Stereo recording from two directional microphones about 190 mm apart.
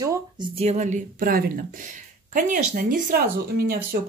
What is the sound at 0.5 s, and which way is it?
Speech, 35° right (ahead or behind).